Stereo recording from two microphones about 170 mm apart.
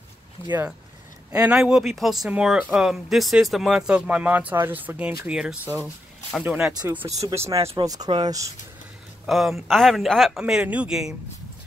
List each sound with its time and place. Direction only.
0.5 s speech: 10° right (ahead or behind)
9.2 s speech: centre (ahead or behind)